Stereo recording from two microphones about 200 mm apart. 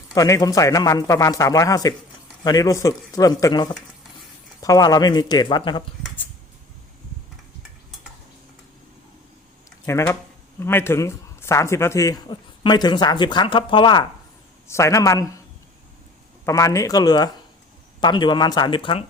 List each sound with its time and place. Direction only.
0.1 s a man's voice: 15° left (ahead or behind)
9.8 s a man's voice: 15° left (ahead or behind)
16.5 s a man's voice: 15° left (ahead or behind)